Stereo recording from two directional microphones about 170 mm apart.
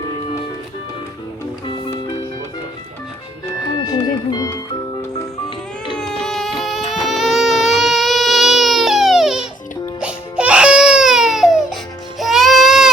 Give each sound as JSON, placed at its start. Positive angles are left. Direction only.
{"t": 3.8, "sound": "speech", "side_deg": 20}
{"t": 5.9, "sound": "a sound", "side_deg": 5}
{"t": 7.0, "sound": "baby cry", "side_deg": 0}
{"t": 10.0, "sound": "music", "side_deg": -5}